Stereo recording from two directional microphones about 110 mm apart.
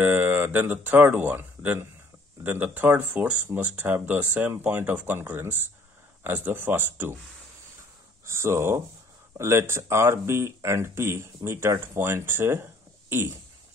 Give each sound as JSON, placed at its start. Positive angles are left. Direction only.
{"t": 0.0, "sound": "speech", "side_deg": -15}
{"t": 8.3, "sound": "speech", "side_deg": -25}